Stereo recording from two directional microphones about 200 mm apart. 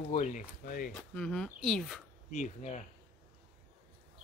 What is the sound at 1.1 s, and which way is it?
Speech, 5° left (ahead or behind).